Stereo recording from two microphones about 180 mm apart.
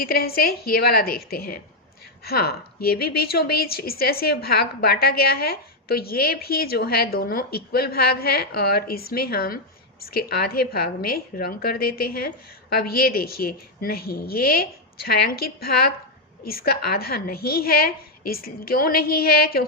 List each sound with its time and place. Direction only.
0.0 s a woman's voice: 55° left (ahead or behind)